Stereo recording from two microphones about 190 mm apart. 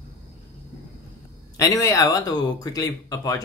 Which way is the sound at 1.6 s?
15° left (ahead or behind).